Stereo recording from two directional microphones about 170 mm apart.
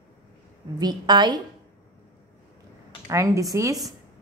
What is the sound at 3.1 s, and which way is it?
Speech, 15° right (ahead or behind).